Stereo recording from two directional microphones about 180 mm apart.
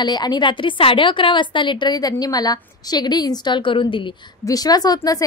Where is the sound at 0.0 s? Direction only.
25° left (ahead or behind).